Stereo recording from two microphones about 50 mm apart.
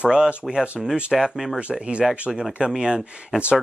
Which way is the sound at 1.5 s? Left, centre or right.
Centre.